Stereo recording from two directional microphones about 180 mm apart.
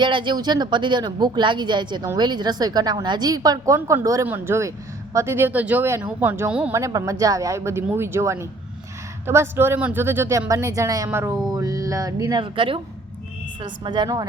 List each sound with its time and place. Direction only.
0.0 s speech: 25° right (ahead or behind)